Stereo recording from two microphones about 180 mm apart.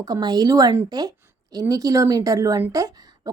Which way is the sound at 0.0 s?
20° right (ahead or behind).